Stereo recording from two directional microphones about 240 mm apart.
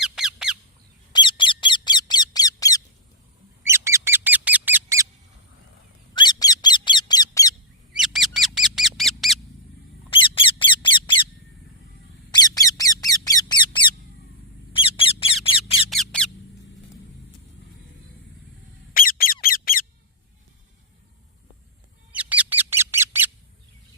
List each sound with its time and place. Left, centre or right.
0.0 s bird: centre
1.1 s squeak: centre
3.6 s bird: centre
6.1 s squeak: centre
7.9 s a sound: centre
10.1 s a sound: left
12.3 s squeak: centre
15.9 s squeak: centre
18.9 s squeak: left
22.1 s bird: centre